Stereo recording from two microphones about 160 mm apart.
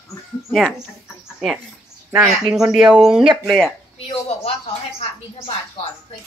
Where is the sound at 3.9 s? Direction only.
40° left (ahead or behind).